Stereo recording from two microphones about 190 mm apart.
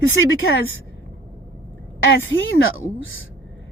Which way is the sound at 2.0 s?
90° left.